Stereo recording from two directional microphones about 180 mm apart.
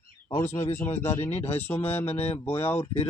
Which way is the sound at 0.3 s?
15° left (ahead or behind).